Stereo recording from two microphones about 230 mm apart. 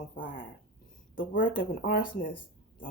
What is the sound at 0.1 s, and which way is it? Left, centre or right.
A woman's voice, left.